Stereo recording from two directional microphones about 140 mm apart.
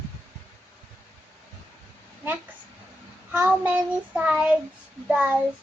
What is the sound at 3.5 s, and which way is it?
Child singing, 10° right (ahead or behind).